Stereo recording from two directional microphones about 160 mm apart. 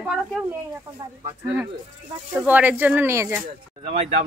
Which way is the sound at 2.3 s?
10° right (ahead or behind).